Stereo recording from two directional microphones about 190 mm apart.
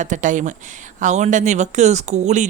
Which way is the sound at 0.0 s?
45° right (ahead or behind).